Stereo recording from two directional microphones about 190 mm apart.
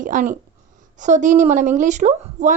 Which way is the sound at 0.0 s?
40° right (ahead or behind).